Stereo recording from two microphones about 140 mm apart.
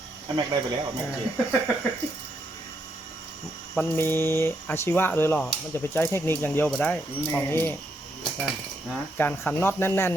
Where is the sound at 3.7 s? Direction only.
15° left (ahead or behind).